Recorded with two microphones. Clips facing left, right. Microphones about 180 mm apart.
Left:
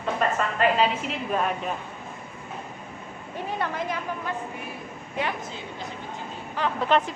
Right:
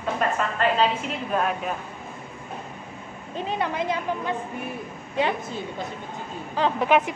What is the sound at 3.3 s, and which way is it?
A woman's voice, 20° right (ahead or behind).